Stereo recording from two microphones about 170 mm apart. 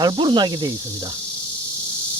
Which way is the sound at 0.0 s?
25° right (ahead or behind).